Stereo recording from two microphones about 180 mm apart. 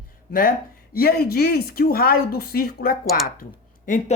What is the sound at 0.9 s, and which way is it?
Speech, 55° left (ahead or behind).